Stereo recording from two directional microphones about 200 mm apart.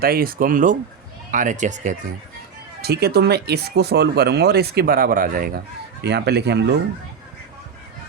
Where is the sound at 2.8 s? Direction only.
50° right (ahead or behind).